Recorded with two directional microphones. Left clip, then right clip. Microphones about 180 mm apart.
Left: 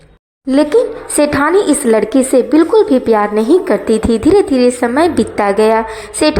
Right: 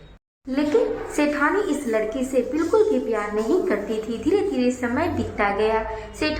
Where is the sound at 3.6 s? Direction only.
40° left (ahead or behind).